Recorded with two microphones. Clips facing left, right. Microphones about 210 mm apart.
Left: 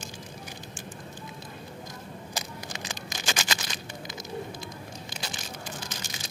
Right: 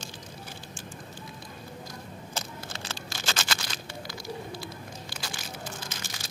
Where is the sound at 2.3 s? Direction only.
15° left (ahead or behind).